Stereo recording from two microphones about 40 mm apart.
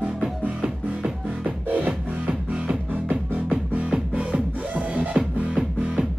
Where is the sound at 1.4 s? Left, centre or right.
Right.